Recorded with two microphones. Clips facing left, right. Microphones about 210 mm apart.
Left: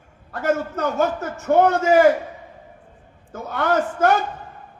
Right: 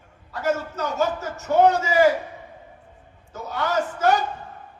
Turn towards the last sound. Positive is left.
turn(degrees=55)  # may be behind; listen again after turning